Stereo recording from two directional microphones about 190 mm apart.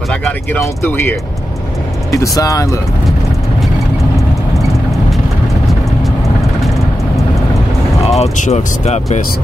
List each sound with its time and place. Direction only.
0.1 s speech: 5° left (ahead or behind)
8.2 s speech: 35° left (ahead or behind)